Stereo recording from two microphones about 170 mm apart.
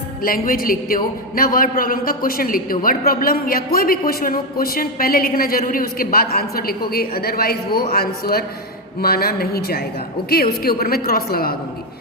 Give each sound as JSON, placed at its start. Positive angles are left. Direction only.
{"t": 0.2, "sound": "a man's voice", "side_deg": 55}